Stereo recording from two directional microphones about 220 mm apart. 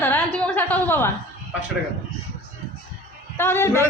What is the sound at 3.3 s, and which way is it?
Speech, 10° left (ahead or behind).